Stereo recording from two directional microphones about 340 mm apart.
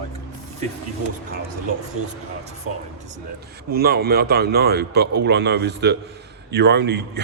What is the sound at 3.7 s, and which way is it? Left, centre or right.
Speech, right.